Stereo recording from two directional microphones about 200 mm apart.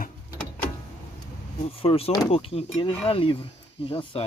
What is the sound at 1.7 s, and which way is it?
Speech, 30° left (ahead or behind).